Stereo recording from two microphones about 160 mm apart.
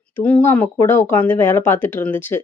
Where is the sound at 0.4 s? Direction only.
10° left (ahead or behind).